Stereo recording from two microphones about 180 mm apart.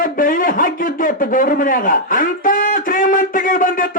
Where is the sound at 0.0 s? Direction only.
50° left (ahead or behind).